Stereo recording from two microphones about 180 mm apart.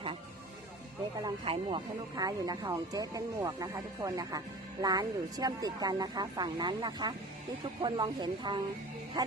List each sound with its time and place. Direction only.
1.2 s speech: 25° right (ahead or behind)
9.2 s music: 20° right (ahead or behind)